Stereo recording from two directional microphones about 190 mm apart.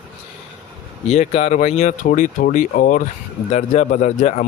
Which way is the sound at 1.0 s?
35° left (ahead or behind).